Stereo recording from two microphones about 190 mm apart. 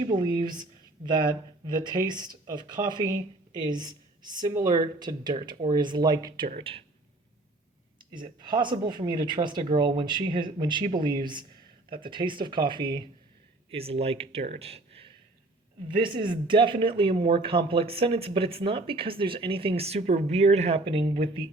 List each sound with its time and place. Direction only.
0.0 s speech: 25° right (ahead or behind)
7.9 s speech: 25° right (ahead or behind)